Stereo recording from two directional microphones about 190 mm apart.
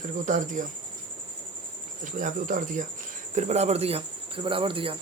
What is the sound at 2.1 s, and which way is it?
Speech, 45° right (ahead or behind).